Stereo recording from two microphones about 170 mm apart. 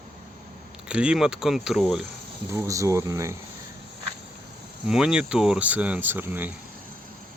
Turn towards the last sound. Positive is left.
turn(degrees=-10)  # may be behind; listen again after turning